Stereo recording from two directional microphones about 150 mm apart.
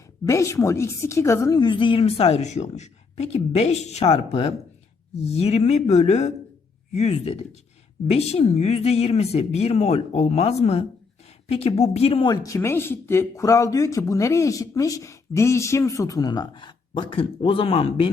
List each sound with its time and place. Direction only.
0.3 s a woman's voice: 20° left (ahead or behind); by 12.3 s 40° left (ahead or behind)
12.3 s a woman's voice: 20° left (ahead or behind); by 18.1 s 40° left (ahead or behind)